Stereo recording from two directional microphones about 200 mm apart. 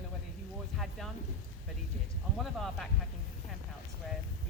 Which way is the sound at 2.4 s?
Centre (ahead or behind).